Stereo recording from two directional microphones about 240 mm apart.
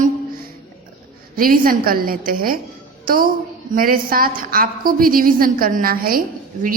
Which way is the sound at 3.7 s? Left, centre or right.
Right.